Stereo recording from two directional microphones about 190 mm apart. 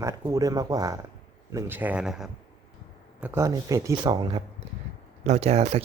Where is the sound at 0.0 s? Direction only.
15° right (ahead or behind).